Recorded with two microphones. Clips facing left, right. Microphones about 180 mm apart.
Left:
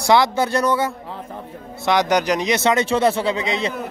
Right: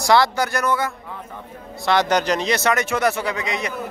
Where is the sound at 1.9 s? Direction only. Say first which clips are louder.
Left 1 dB; 15° left (ahead or behind).